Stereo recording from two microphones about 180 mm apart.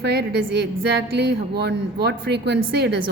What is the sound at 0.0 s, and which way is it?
A woman's voice, 65° right (ahead or behind).